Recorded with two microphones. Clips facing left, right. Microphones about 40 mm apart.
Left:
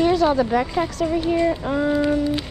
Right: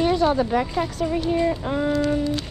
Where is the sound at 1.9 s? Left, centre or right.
Centre.